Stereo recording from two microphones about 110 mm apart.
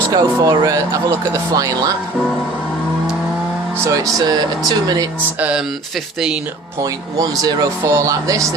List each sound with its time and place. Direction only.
0.1 s speech: 35° right (ahead or behind)
3.8 s speech: 30° right (ahead or behind)
5.4 s speech: 10° right (ahead or behind)
7.2 s speech: 35° right (ahead or behind)